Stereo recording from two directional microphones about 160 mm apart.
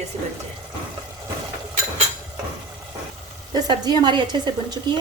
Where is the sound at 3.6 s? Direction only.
25° right (ahead or behind).